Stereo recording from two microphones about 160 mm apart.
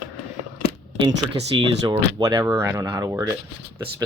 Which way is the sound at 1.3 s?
40° right (ahead or behind).